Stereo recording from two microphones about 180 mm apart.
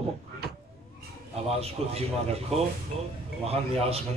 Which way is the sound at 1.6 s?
35° right (ahead or behind).